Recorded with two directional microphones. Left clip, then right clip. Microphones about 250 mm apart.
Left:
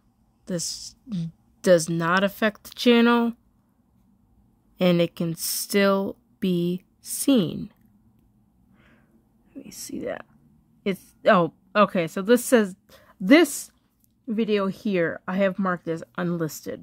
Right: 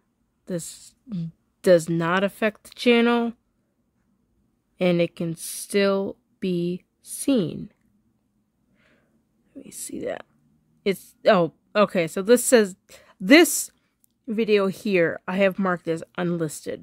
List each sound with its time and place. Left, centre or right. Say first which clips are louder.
1.1 s a woman's voice: right 2 dB; centre
4.7 s speech: even; centre
8.7 s a sound: left 3 dB; centre
9.8 s a woman's voice: right 1 dB; centre